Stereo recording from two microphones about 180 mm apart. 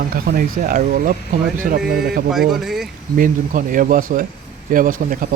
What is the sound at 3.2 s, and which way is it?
Speech, 50° right (ahead or behind).